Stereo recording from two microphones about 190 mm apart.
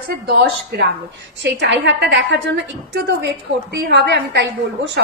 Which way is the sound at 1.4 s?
70° right (ahead or behind).